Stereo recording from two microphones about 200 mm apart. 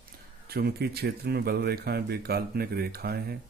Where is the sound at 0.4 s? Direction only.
50° right (ahead or behind).